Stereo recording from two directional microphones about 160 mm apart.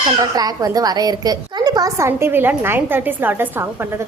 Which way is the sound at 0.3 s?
25° right (ahead or behind).